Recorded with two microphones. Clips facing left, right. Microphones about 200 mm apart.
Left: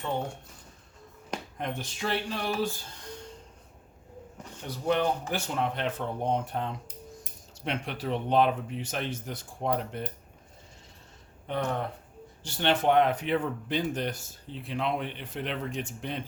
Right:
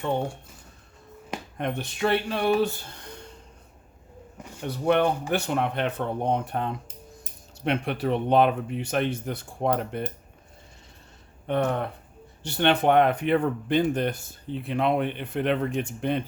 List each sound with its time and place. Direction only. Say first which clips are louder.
1.5 s speech: right 8 dB; 60° right (ahead or behind)
4.6 s speech: right 5 dB; 60° right (ahead or behind)
11.4 s speech: right 5 dB; 60° right (ahead or behind)